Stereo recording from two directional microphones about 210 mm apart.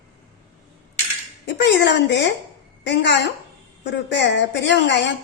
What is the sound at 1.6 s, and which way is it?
A woman's voice, 55° left (ahead or behind).